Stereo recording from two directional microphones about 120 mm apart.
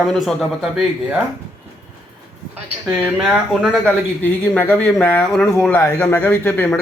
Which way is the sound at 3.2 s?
Centre (ahead or behind).